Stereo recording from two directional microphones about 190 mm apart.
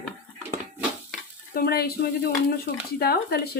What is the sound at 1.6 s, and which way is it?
Speech, 55° left (ahead or behind).